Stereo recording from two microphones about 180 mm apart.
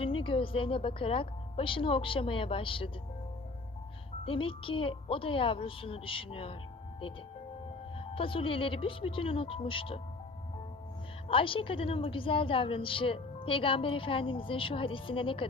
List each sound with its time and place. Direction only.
0.0 s a woman's voice: 30° left (ahead or behind)
4.3 s a woman's voice: 30° left (ahead or behind)
7.9 s a woman's voice: 30° left (ahead or behind)
11.3 s a woman's voice: 30° left (ahead or behind)